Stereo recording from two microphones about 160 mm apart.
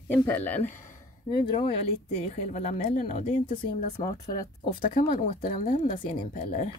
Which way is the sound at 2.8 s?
55° left (ahead or behind).